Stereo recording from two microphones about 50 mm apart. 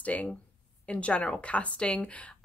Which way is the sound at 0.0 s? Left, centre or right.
Left.